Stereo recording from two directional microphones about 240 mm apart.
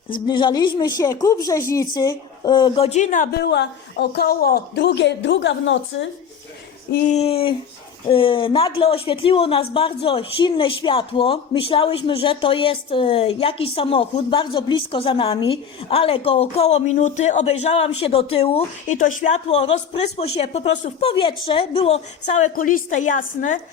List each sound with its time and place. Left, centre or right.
0.3 s speech: centre; by 6.1 s left
6.9 s speech: left